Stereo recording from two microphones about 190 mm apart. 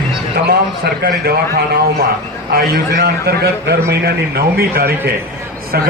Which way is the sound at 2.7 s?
55° right (ahead or behind).